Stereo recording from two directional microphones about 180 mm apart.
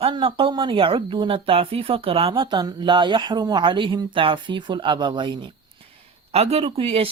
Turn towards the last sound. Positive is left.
turn(degrees=-35)  # may be behind; listen again after turning